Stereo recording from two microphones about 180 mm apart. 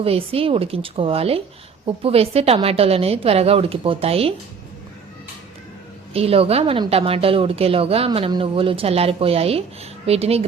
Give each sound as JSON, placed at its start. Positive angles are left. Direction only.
{"t": 0.0, "sound": "a woman's voice", "side_deg": -30}
{"t": 6.1, "sound": "a woman's voice", "side_deg": -35}